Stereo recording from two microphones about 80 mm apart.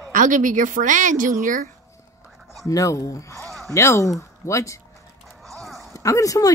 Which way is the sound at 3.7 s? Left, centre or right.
Left.